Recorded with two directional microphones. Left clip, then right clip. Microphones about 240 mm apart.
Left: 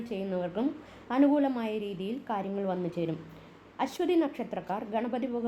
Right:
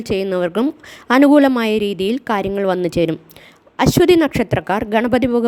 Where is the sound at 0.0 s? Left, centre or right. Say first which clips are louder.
Right 15 dB; right.